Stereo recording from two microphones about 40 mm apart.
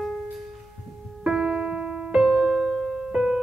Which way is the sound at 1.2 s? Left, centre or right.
Centre.